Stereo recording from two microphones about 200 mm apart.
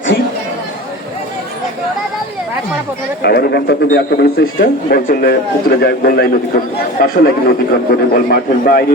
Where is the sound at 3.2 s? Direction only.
55° left (ahead or behind).